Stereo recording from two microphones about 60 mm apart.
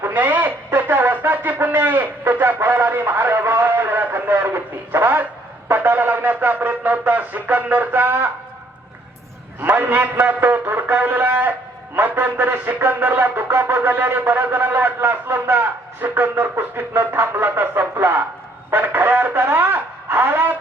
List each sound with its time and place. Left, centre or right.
0.0 s radio: right
5.6 s a sound: right
9.6 s music: right
18.7 s speech: right